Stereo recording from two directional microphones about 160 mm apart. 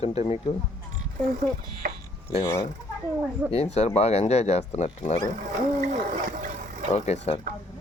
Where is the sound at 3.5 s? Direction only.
40° left (ahead or behind).